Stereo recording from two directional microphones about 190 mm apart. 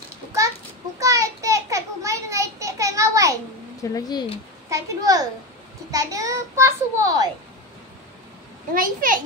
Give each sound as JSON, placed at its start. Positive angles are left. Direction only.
{"t": 0.9, "sound": "a sound", "side_deg": -15}
{"t": 3.9, "sound": "speech", "side_deg": 20}
{"t": 4.6, "sound": "a child's voice", "side_deg": -15}
{"t": 8.7, "sound": "a child's voice", "side_deg": -45}